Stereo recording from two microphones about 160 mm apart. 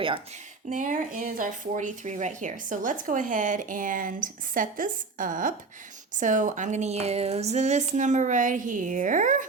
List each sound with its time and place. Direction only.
0.7 s speech: 55° right (ahead or behind)